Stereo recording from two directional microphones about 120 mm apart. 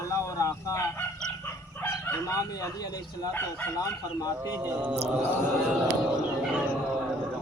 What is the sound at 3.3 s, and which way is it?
Speech, 20° left (ahead or behind).